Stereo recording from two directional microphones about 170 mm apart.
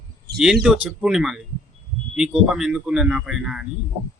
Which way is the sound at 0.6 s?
5° right (ahead or behind).